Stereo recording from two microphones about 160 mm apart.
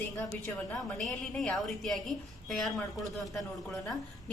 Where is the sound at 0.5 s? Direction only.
Centre (ahead or behind).